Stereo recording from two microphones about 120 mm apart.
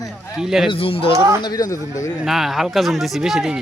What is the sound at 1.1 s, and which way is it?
Speech, 25° right (ahead or behind).